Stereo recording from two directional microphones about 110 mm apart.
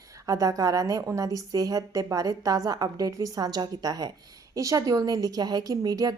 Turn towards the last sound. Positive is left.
turn(degrees=-35)  # may be behind; listen again after turning